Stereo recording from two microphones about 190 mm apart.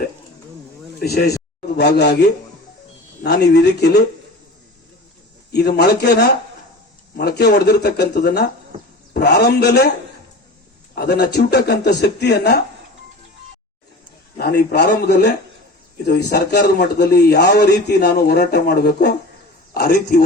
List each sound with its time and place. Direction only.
0.9 s a man's voice: 55° left (ahead or behind)
5.5 s a man's voice: 60° left (ahead or behind)
10.9 s a man's voice: 55° left (ahead or behind)
14.3 s a man's voice: 55° left (ahead or behind)